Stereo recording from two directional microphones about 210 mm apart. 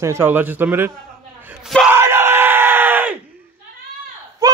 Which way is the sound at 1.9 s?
10° right (ahead or behind).